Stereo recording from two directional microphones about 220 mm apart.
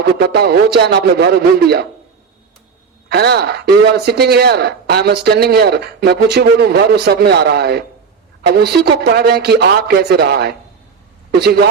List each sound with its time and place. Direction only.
0.2 s speech: 45° right (ahead or behind)
3.1 s speech: 50° right (ahead or behind)